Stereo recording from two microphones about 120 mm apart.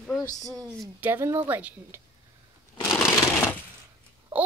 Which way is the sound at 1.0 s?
20° right (ahead or behind).